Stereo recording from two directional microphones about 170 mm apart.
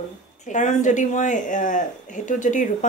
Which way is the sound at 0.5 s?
45° left (ahead or behind).